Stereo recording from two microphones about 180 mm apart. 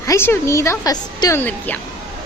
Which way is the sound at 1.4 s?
10° left (ahead or behind).